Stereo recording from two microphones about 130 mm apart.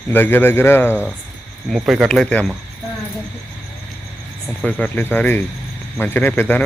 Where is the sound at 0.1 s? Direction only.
15° left (ahead or behind).